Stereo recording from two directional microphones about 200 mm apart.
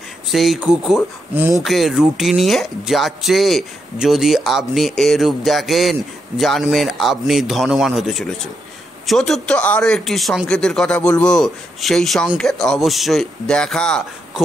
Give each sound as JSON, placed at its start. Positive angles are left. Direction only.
{"t": 0.3, "sound": "speech", "side_deg": 0}